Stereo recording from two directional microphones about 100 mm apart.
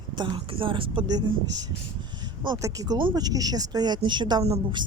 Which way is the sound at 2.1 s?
50° right (ahead or behind).